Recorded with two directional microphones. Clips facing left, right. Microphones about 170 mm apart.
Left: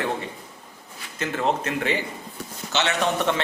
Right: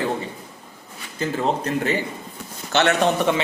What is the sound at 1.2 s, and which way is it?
Speech, 40° right (ahead or behind).